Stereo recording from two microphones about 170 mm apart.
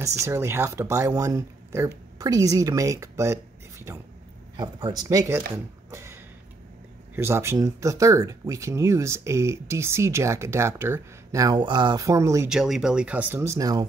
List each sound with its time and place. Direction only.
0.0 s a woman's voice: 15° right (ahead or behind)
4.6 s a woman's voice: 25° right (ahead or behind)
5.9 s a sound: 15° right (ahead or behind)
7.2 s speech: 15° right (ahead or behind)
12.4 s speech: centre (ahead or behind); by 13.8 s 20° right (ahead or behind)